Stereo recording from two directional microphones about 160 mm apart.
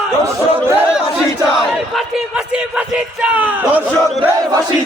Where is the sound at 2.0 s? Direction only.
5° right (ahead or behind).